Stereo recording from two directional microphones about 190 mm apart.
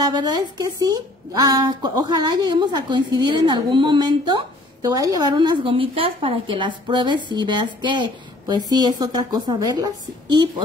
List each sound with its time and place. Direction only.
0.0 s a woman's voice: 20° right (ahead or behind)